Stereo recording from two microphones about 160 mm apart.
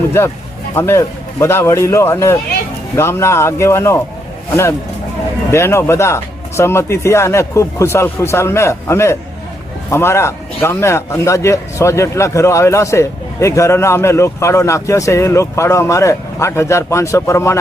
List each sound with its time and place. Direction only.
0.8 s speech: 15° left (ahead or behind)
5.5 s speech: 15° left (ahead or behind)